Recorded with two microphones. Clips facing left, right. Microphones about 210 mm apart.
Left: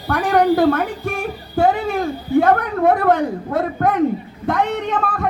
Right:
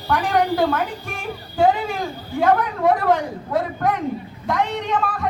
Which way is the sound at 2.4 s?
55° left (ahead or behind).